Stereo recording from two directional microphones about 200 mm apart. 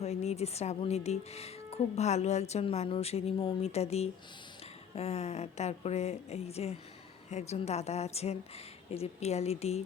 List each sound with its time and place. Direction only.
0.0 s speech: 35° left (ahead or behind)